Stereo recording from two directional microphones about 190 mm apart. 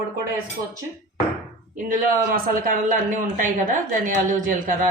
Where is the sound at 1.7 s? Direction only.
45° right (ahead or behind).